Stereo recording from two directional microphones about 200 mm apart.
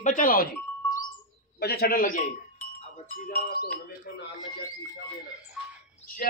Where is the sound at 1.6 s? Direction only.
50° left (ahead or behind).